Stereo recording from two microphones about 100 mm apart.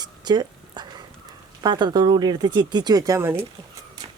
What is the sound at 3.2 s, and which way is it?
Speech, 25° right (ahead or behind).